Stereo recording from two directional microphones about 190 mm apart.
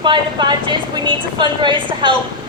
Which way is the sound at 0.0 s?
25° right (ahead or behind).